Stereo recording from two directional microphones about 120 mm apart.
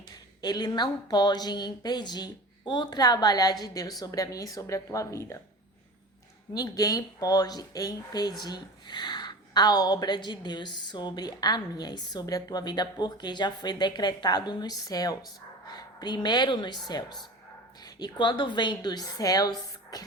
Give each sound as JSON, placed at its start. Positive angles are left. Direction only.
{"t": 0.4, "sound": "speech", "side_deg": 35}
{"t": 6.5, "sound": "speech", "side_deg": 30}